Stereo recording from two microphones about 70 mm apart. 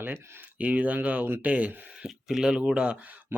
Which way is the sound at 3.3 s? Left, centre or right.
Right.